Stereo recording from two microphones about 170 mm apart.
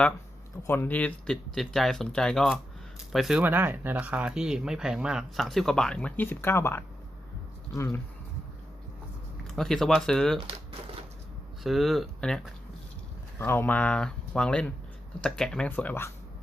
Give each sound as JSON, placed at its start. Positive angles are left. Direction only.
{"t": 0.7, "sound": "speech", "side_deg": 10}
{"t": 9.6, "sound": "speech", "side_deg": 0}
{"t": 11.6, "sound": "speech", "side_deg": 0}
{"t": 13.4, "sound": "speech", "side_deg": 10}